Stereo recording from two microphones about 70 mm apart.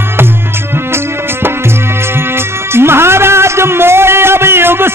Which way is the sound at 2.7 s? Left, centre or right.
Right.